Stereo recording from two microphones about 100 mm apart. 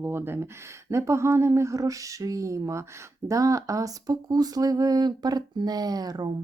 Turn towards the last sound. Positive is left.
turn(degrees=-40)  # may be behind; listen again after turning